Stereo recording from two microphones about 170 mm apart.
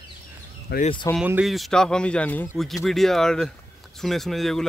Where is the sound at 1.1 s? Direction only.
5° right (ahead or behind).